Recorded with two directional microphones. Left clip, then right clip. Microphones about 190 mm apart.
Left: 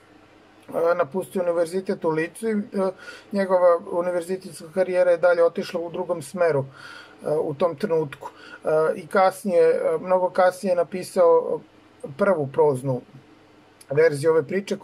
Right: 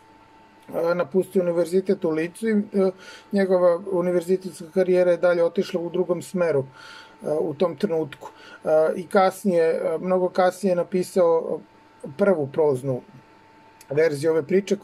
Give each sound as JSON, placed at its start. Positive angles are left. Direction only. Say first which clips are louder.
{"t": 0.7, "sound": "speech", "louder": "left 1 dB", "side_deg": -25}
{"t": 13.9, "sound": "speech", "louder": "left 2 dB", "side_deg": -25}